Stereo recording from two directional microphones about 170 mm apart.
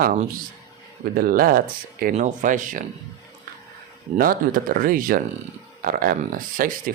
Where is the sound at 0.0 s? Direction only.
55° right (ahead or behind).